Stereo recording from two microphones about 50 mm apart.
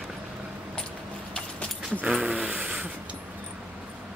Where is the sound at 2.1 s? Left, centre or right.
Centre.